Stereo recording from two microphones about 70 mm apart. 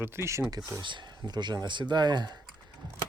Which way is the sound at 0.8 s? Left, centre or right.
Right.